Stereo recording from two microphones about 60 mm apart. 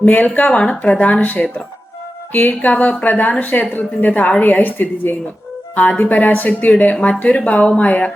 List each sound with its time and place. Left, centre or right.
0.0 s a woman's voice: left